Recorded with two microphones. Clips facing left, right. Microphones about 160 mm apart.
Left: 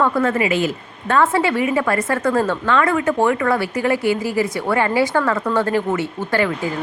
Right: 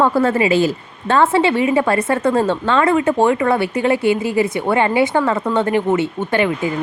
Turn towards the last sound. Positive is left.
turn(degrees=-20)  # may be behind; listen again after turning